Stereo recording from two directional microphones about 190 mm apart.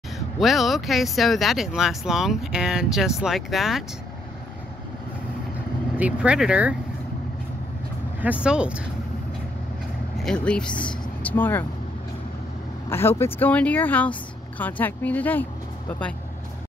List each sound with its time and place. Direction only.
0.4 s speech: centre (ahead or behind)
5.9 s speech: 5° right (ahead or behind)
8.2 s speech: 5° right (ahead or behind)
10.1 s speech: 5° left (ahead or behind)
12.9 s speech: 10° left (ahead or behind)